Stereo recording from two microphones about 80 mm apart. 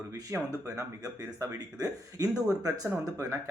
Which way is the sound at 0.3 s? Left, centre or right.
Right.